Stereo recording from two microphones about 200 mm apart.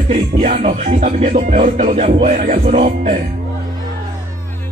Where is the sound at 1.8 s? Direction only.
30° right (ahead or behind).